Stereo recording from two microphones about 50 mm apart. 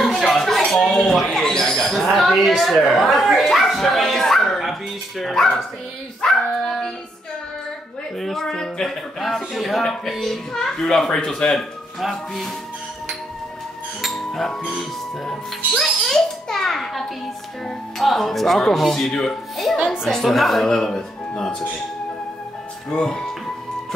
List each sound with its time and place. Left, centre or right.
0.0 s a sound: centre
0.7 s owl: centre
2.9 s speech: centre
8.2 s a child's voice: centre
12.0 s speech: centre
14.0 s music: centre
15.8 s a child's voice: centre
22.8 s a child's voice: centre